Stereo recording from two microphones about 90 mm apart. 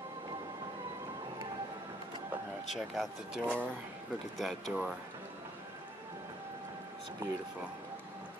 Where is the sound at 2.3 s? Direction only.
20° right (ahead or behind).